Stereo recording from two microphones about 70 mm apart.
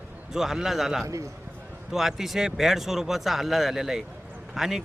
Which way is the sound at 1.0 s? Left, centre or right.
Right.